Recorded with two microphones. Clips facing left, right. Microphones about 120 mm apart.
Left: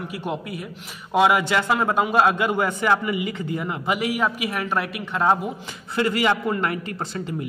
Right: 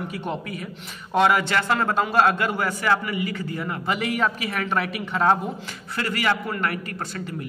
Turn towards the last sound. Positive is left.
turn(degrees=25)  # may be behind; listen again after turning